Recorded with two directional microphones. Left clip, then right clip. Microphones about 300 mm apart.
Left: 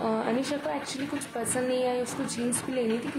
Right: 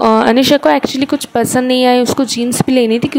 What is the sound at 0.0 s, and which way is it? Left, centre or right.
Speech, right.